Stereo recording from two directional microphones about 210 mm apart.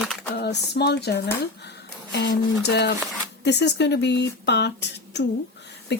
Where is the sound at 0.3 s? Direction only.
55° left (ahead or behind).